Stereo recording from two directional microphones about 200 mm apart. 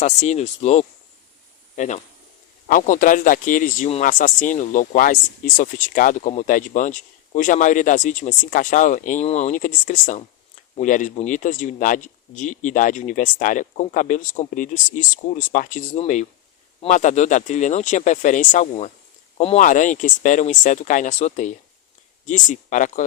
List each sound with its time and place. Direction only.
0.0 s a man's voice: 35° left (ahead or behind)